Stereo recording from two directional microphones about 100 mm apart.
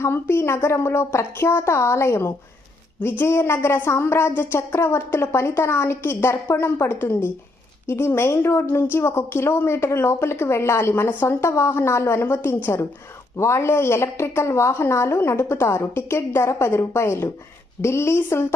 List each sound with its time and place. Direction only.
0.0 s a woman's voice: 25° left (ahead or behind)